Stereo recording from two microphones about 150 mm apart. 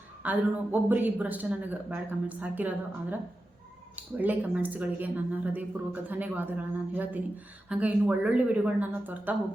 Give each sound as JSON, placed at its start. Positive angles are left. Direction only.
{"t": 0.2, "sound": "speech", "side_deg": -10}